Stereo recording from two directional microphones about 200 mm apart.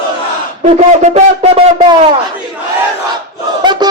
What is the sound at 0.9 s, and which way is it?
Speech, 35° right (ahead or behind).